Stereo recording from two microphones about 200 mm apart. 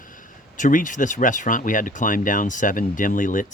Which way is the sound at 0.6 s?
40° left (ahead or behind).